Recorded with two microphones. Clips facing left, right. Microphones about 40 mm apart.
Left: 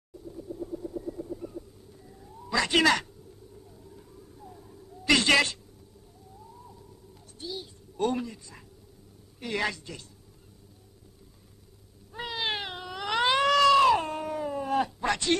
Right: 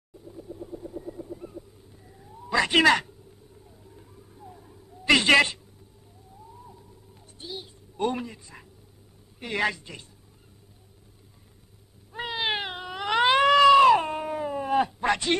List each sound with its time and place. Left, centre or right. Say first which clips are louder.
0.3 s vehicle: left 2 dB; centre
3.9 s a sound: left 1 dB; centre
7.3 s a woman's voice: left 1 dB; right
12.1 s cat: right 3 dB; right